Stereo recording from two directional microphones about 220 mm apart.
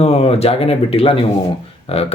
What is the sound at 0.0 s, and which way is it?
Speech, 30° left (ahead or behind).